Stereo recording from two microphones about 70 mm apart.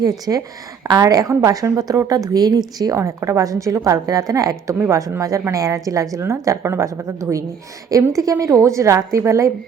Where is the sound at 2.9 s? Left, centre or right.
Right.